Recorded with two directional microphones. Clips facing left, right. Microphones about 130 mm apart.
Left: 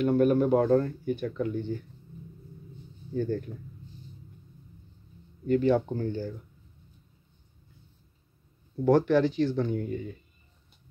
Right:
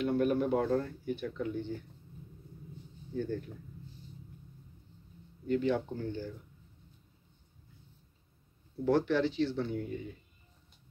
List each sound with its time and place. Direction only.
0.0 s speech: 45° left (ahead or behind)
3.2 s speech: 50° left (ahead or behind)
5.5 s speech: 50° left (ahead or behind)
8.8 s speech: 45° left (ahead or behind)